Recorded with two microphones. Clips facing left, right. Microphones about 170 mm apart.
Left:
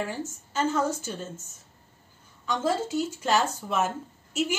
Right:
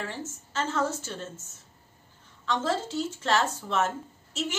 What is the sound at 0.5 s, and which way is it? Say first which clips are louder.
Speech: left 3 dB; 10° left (ahead or behind).